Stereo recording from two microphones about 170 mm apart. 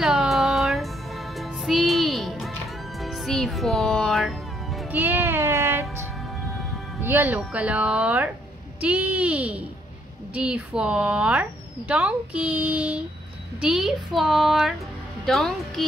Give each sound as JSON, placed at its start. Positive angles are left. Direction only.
{"t": 0.0, "sound": "a sound", "side_deg": 0}
{"t": 1.4, "sound": "music", "side_deg": 0}
{"t": 4.9, "sound": "music", "side_deg": -10}
{"t": 7.0, "sound": "a woman's voice", "side_deg": -15}